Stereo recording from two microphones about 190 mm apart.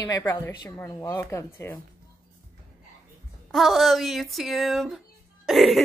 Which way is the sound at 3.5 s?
Centre (ahead or behind).